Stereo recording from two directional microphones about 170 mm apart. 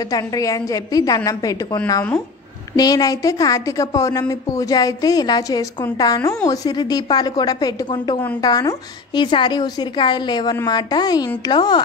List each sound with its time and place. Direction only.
0.1 s a woman's voice: 20° left (ahead or behind)